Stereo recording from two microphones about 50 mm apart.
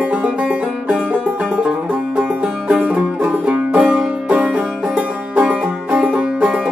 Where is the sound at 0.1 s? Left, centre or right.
Right.